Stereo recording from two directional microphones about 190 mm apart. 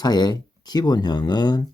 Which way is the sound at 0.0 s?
20° left (ahead or behind).